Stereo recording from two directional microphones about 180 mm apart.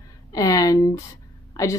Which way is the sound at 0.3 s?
20° left (ahead or behind).